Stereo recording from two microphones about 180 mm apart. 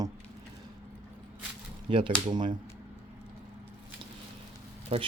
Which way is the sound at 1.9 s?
30° right (ahead or behind).